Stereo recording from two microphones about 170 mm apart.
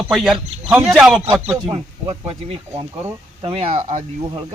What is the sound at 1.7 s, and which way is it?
Speech, 35° right (ahead or behind).